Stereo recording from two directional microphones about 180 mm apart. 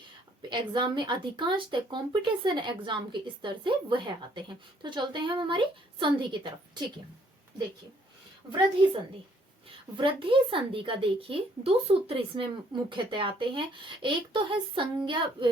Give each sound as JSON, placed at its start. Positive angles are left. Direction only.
{"t": 0.5, "sound": "speech", "side_deg": -25}
{"t": 10.0, "sound": "speech", "side_deg": -30}